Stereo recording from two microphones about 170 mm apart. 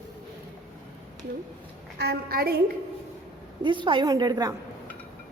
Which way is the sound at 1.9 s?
70° right (ahead or behind).